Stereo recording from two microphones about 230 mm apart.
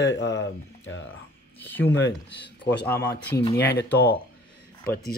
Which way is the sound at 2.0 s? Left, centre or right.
Left.